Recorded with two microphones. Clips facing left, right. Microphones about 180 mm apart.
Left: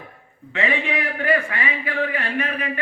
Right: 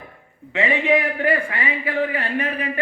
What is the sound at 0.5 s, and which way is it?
A man's voice, 20° right (ahead or behind).